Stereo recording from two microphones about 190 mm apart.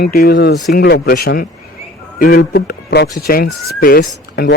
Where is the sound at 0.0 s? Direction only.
55° left (ahead or behind).